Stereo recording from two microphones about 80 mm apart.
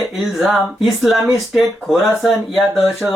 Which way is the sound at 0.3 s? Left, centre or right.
Centre.